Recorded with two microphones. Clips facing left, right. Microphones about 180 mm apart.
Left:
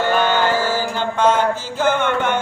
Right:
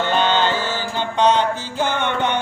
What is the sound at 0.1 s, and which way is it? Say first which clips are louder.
Music: left 1 dB; 20° right (ahead or behind).